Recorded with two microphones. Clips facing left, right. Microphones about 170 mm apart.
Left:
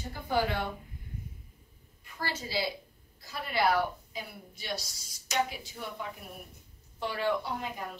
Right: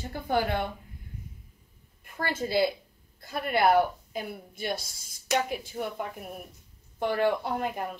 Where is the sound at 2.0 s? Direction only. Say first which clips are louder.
Right 6 dB; 50° right (ahead or behind).